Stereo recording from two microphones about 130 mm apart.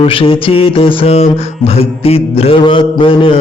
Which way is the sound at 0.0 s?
45° left (ahead or behind).